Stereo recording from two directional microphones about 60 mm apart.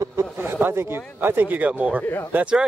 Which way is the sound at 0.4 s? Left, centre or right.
Right.